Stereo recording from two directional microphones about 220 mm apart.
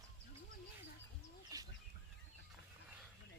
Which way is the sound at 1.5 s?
15° right (ahead or behind).